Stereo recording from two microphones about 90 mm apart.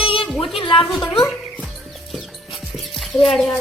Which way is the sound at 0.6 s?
75° left (ahead or behind).